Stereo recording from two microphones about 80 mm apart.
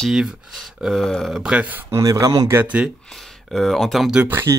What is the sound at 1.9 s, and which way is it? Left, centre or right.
Speech, right.